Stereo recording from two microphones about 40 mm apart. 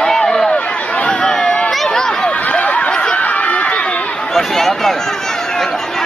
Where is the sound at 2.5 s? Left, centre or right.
Left.